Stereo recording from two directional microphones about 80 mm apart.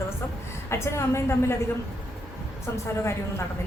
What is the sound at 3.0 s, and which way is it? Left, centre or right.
Speech, left.